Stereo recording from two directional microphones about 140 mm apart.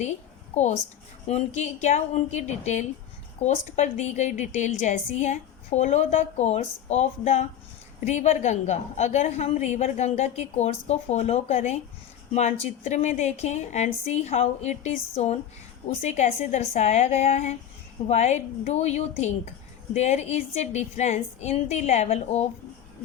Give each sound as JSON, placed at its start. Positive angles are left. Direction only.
{"t": 0.5, "sound": "a woman's voice", "side_deg": 55}